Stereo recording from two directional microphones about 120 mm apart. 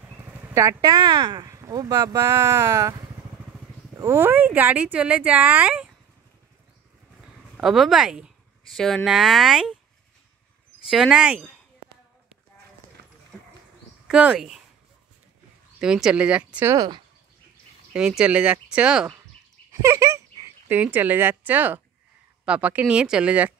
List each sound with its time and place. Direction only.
0.3 s speech: 25° right (ahead or behind)
7.5 s speech: centre (ahead or behind)
10.9 s speech: 5° right (ahead or behind)
14.0 s speech: 5° right (ahead or behind)
15.8 s speech: 5° right (ahead or behind)
16.7 s speech: 35° right (ahead or behind)
17.9 s speech: 5° right (ahead or behind)
19.7 s speech: 25° right (ahead or behind)